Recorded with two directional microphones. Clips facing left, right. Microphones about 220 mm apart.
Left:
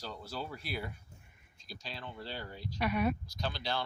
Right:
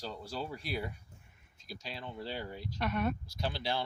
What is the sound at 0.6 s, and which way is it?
Speech, 5° left (ahead or behind).